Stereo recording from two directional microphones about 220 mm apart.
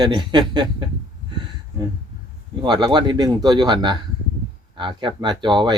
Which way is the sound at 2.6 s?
20° right (ahead or behind).